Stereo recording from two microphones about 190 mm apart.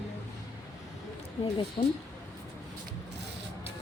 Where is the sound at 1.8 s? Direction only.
25° left (ahead or behind).